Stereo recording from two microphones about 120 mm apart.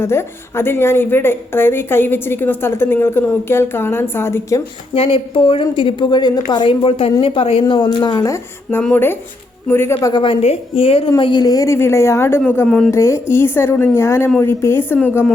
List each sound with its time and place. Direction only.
0.0 s speech: 20° left (ahead or behind)
4.9 s a woman's voice: 50° left (ahead or behind); by 10.1 s 20° left (ahead or behind)
10.1 s speech: 40° left (ahead or behind)
10.4 s a woman's voice: 50° left (ahead or behind)
11.2 s speech: 40° left (ahead or behind); by 12.4 s 20° left (ahead or behind)
12.6 s speech: 5° left (ahead or behind)
12.9 s a woman's voice: 20° left (ahead or behind)